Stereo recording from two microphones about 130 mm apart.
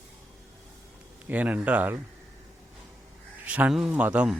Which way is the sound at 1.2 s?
10° right (ahead or behind).